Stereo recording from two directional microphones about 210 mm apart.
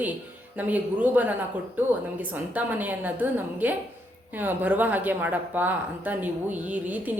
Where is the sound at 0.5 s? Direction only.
10° right (ahead or behind).